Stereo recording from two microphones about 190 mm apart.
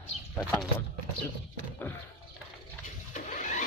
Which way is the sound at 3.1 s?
40° left (ahead or behind).